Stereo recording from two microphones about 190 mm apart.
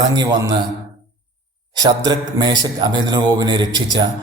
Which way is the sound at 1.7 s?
25° right (ahead or behind).